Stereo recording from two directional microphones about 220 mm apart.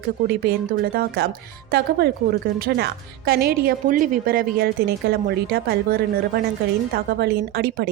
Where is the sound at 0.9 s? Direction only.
45° right (ahead or behind).